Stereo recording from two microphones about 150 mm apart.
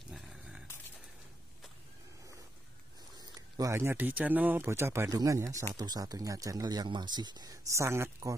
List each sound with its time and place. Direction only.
0.1 s dog: 5° right (ahead or behind)
3.2 s speech: 25° right (ahead or behind)